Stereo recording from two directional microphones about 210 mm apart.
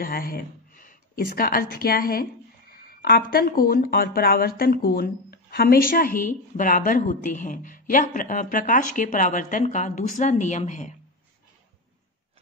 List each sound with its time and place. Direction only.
0.0 s a woman's voice: 45° left (ahead or behind)